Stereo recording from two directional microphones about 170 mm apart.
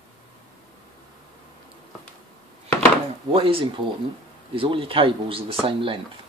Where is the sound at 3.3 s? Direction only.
35° right (ahead or behind).